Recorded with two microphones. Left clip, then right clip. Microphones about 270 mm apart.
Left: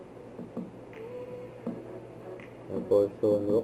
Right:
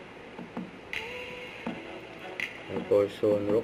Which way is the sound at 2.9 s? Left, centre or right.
Right.